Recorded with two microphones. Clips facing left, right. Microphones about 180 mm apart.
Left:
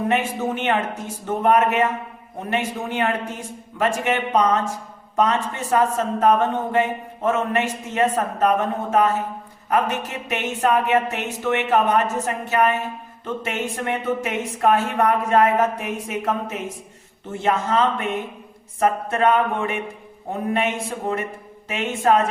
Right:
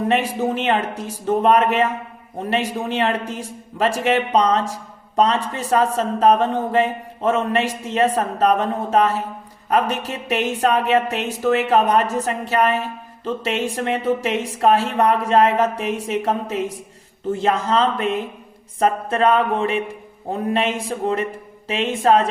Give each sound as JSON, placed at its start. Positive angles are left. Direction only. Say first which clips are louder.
{"t": 0.1, "sound": "speech", "louder": "right 2 dB", "side_deg": -35}